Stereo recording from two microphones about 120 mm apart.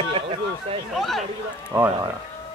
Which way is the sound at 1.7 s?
20° right (ahead or behind).